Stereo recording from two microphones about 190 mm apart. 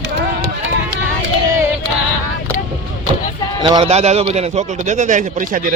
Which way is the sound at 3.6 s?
25° right (ahead or behind).